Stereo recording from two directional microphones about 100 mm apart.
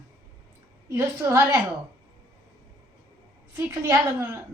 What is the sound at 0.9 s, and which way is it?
Speech, 30° right (ahead or behind).